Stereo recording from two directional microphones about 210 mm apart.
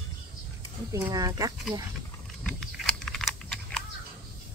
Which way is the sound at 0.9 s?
15° right (ahead or behind).